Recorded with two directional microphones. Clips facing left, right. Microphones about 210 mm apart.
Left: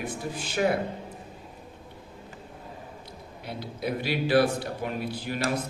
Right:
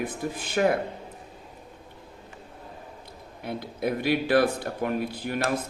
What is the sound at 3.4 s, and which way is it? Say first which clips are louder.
A man's voice: right 4 dB; 50° right (ahead or behind).